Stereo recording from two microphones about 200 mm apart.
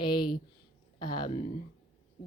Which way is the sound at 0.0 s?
25° left (ahead or behind).